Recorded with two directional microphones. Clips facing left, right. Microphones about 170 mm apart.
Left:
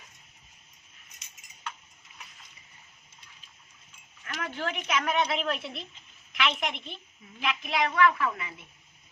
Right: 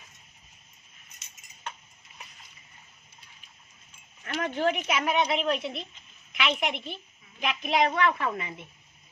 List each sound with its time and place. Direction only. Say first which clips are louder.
4.4 s speech: right 7 dB; 20° right (ahead or behind)
7.3 s a woman's voice: right 4 dB; 20° right (ahead or behind)